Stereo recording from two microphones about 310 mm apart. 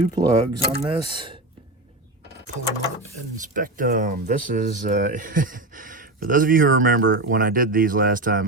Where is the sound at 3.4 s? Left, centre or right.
Right.